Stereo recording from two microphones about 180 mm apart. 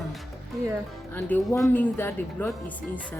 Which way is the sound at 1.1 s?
10° left (ahead or behind).